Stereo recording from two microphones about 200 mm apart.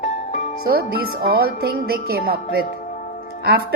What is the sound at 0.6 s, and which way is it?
Speech, 50° right (ahead or behind).